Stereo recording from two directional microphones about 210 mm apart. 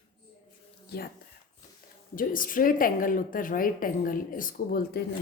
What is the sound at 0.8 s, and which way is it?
Speech, 45° left (ahead or behind).